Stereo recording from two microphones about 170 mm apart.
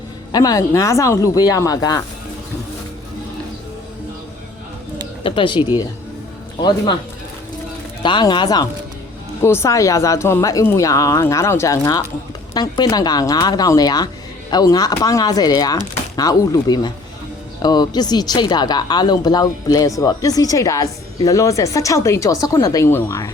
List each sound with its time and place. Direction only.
0.3 s speech: 25° left (ahead or behind)
5.2 s speech: 30° left (ahead or behind)
8.0 s speech: 25° left (ahead or behind)
9.4 s speech: 15° left (ahead or behind)